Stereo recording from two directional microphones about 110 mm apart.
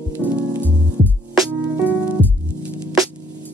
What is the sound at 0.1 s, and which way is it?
Music, 15° right (ahead or behind).